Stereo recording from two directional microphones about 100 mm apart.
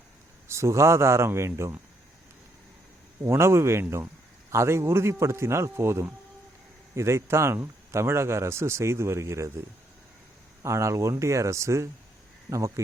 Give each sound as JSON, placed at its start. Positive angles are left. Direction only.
{"t": 0.4, "sound": "a man's voice", "side_deg": -30}
{"t": 3.2, "sound": "a man's voice", "side_deg": -25}